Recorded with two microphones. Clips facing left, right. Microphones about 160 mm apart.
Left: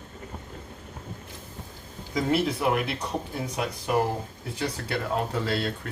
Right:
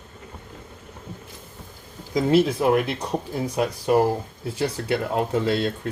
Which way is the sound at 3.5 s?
35° right (ahead or behind).